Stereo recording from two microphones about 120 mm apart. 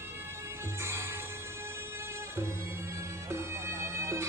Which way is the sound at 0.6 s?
20° right (ahead or behind).